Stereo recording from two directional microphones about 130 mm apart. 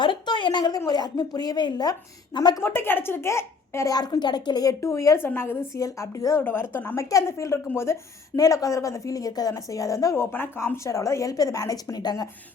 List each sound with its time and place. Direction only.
0.0 s a sound: 40° left (ahead or behind)
0.9 s a woman's voice: 30° left (ahead or behind)
2.6 s a woman's voice: 15° left (ahead or behind)